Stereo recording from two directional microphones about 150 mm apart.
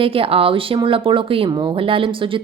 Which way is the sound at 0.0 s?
40° right (ahead or behind).